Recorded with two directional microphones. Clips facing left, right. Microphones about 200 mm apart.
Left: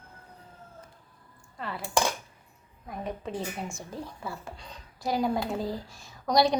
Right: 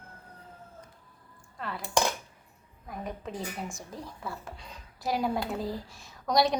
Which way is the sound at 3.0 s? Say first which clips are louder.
Left 3 dB; centre (ahead or behind).